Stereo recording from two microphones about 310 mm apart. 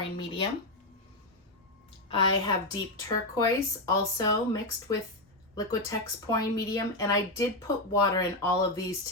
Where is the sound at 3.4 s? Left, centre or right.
Centre.